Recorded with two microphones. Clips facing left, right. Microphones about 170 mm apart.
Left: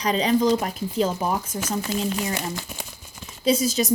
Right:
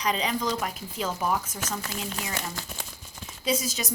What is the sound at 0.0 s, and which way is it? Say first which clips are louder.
A woman's voice: left 7 dB; 35° left (ahead or behind).